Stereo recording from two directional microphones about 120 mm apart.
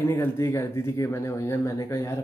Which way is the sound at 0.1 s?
20° left (ahead or behind).